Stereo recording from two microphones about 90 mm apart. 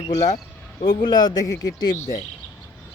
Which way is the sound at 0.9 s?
55° left (ahead or behind).